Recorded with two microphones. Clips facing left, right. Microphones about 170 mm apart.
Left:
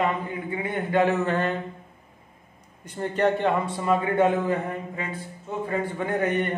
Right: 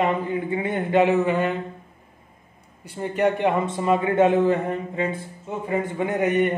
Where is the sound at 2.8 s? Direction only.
10° right (ahead or behind).